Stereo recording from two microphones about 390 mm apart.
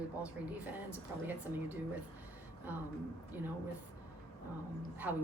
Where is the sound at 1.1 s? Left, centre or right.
Centre.